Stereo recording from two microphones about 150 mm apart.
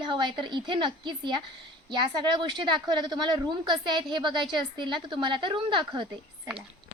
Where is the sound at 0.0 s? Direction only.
30° right (ahead or behind).